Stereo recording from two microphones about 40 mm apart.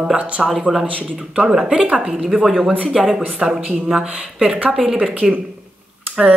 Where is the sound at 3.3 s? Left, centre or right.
Centre.